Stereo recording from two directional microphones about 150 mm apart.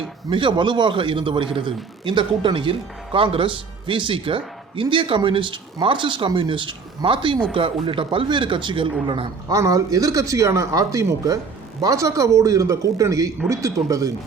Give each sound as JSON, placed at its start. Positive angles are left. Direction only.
{"t": 0.3, "sound": "speech", "side_deg": -35}
{"t": 9.5, "sound": "speech", "side_deg": -25}